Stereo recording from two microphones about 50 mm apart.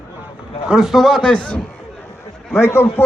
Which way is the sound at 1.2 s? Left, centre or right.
Left.